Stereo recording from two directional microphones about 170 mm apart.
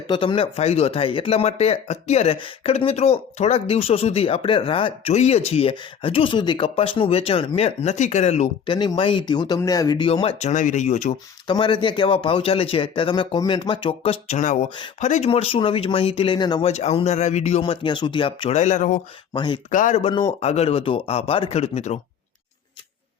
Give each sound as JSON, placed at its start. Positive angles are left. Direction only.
{"t": 0.1, "sound": "speech", "side_deg": 30}
{"t": 8.7, "sound": "speech", "side_deg": 25}
{"t": 10.1, "sound": "speech", "side_deg": 35}
{"t": 11.4, "sound": "speech", "side_deg": 25}
{"t": 16.6, "sound": "speech", "side_deg": 40}
{"t": 18.5, "sound": "speech", "side_deg": 45}
{"t": 19.3, "sound": "speech", "side_deg": 30}
{"t": 19.7, "sound": "speech", "side_deg": 50}
{"t": 20.0, "sound": "speech", "side_deg": 30}